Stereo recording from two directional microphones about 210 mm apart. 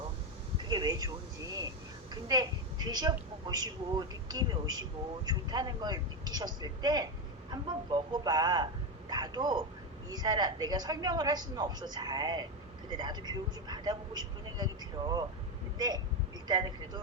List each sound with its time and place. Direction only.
0.7 s a woman's voice: 20° right (ahead or behind)
16.5 s a woman's voice: 20° right (ahead or behind)